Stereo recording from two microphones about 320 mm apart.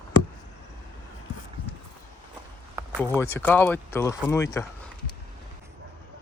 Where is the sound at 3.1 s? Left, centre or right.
Centre.